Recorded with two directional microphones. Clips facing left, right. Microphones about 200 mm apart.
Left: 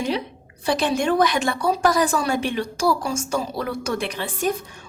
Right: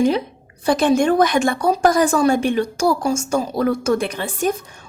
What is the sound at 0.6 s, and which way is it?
A woman's voice, 50° right (ahead or behind).